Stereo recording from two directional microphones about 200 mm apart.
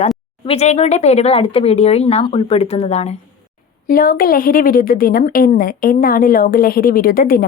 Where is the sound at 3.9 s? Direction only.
45° left (ahead or behind).